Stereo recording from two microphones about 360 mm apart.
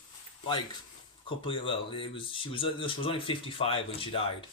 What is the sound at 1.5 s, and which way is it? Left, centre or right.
Speech, centre.